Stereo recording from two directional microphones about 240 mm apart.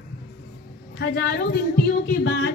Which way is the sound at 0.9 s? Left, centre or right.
Left.